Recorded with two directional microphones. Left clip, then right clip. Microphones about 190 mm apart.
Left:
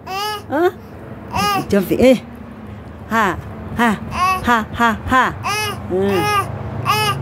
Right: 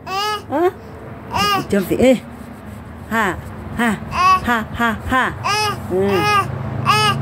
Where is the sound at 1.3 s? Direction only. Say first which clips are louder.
Right 1 dB; centre (ahead or behind).